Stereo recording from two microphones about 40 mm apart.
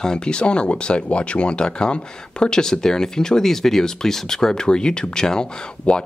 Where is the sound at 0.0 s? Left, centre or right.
Centre.